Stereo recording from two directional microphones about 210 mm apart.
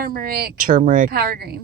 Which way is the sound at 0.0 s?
45° right (ahead or behind).